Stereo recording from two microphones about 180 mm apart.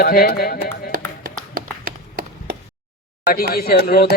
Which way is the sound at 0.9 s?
55° right (ahead or behind).